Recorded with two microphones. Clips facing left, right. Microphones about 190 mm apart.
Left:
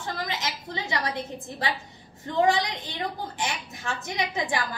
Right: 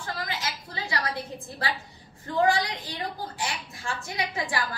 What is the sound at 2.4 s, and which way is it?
A woman's voice, 20° left (ahead or behind).